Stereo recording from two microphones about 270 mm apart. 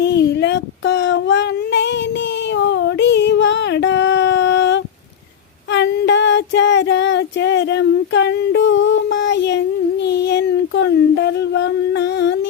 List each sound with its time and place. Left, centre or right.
0.0 s child singing: left
2.6 s a sound: left
5.7 s female singing: left